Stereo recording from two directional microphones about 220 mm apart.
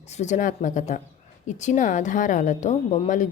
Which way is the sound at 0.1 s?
30° left (ahead or behind).